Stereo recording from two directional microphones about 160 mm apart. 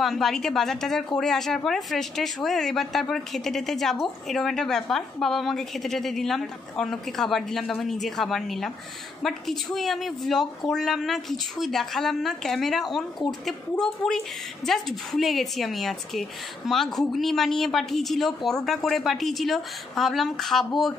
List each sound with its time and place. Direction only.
0.0 s a woman's voice: centre (ahead or behind)